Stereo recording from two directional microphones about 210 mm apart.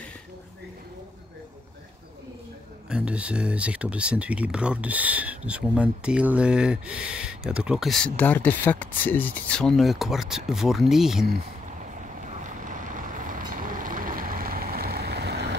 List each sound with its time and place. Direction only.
2.9 s speech: 5° right (ahead or behind)
12.2 s vehicle: 40° right (ahead or behind)